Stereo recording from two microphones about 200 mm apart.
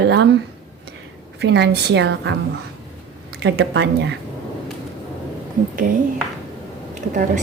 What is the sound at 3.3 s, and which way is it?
Speech, 55° right (ahead or behind).